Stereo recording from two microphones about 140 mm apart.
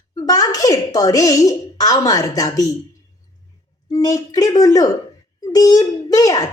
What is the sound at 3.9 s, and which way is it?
Speech, 25° left (ahead or behind).